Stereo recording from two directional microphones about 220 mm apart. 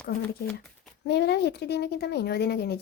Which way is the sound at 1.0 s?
50° left (ahead or behind).